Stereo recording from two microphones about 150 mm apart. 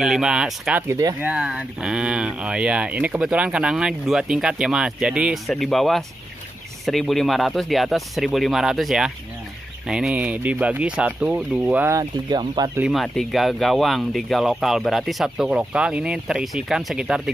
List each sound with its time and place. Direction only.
0.0 s speech: 5° right (ahead or behind)
0.8 s speech: 20° right (ahead or behind)
1.2 s speech: 5° right (ahead or behind)
12.0 s speech: 30° right (ahead or behind)
12.9 s speech: centre (ahead or behind)